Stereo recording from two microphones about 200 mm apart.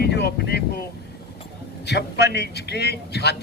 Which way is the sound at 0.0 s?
55° left (ahead or behind).